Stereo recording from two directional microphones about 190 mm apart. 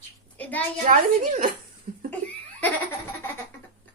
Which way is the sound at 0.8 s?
45° right (ahead or behind).